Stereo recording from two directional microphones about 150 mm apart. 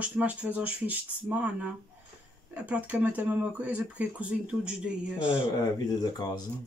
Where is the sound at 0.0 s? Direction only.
10° right (ahead or behind).